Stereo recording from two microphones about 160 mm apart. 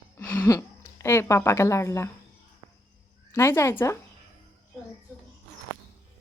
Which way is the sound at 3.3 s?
15° left (ahead or behind).